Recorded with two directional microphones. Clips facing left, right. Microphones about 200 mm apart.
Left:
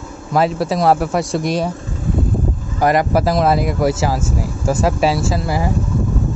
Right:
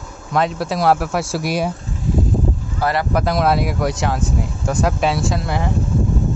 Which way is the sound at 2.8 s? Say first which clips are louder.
Left 5 dB; 15° left (ahead or behind).